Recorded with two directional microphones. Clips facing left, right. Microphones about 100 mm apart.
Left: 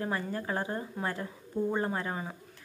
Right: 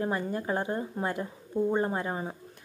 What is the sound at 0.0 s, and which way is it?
Speech, 20° right (ahead or behind).